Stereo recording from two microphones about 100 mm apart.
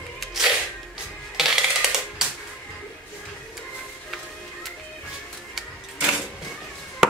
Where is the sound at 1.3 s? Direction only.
5° right (ahead or behind).